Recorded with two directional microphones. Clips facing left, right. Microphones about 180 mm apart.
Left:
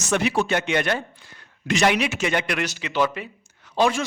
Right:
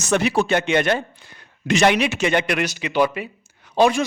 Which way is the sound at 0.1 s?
35° right (ahead or behind).